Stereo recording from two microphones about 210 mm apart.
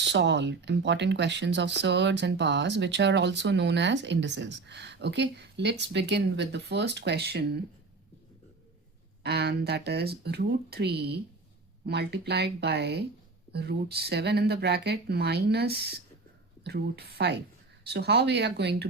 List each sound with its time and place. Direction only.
0.1 s speech: 55° right (ahead or behind)
9.2 s speech: 50° right (ahead or behind)